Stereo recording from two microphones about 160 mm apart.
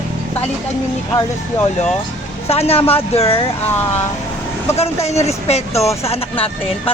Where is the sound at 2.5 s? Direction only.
40° left (ahead or behind).